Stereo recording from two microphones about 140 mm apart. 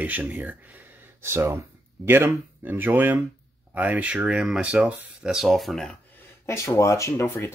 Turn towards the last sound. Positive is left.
turn(degrees=20)  # may be behind; listen again after turning